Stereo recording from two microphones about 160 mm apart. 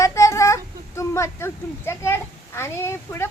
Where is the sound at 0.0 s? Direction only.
20° left (ahead or behind).